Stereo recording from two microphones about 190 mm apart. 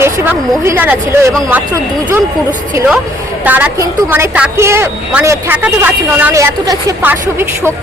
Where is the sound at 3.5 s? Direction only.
10° right (ahead or behind).